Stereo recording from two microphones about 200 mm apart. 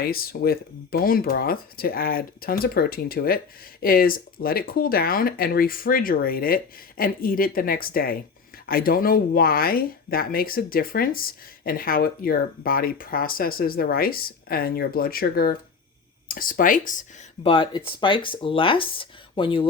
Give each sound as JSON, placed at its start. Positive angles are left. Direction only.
{"t": 0.0, "sound": "speech", "side_deg": 50}
{"t": 17.4, "sound": "speech", "side_deg": 25}